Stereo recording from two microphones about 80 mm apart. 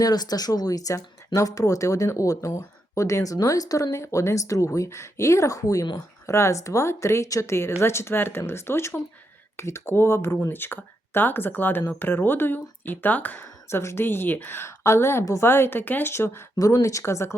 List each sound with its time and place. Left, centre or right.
0.0 s speech: left
3.3 s speech: left
3.9 s speech: left
6.2 s speech: left
13.7 s speech: left
16.6 s speech: left